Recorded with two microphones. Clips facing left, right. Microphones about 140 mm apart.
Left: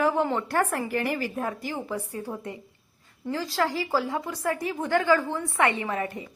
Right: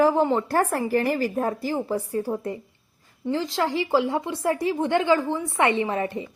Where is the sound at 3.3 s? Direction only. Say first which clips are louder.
Right 2 dB; 25° right (ahead or behind).